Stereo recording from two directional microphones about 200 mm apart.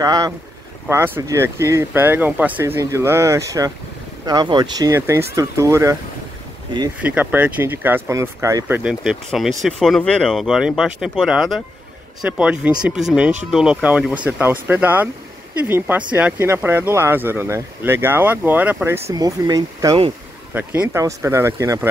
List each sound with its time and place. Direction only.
0.0 s speech: 20° right (ahead or behind)
7.0 s speech: 10° right (ahead or behind)
16.2 s speech: 10° right (ahead or behind)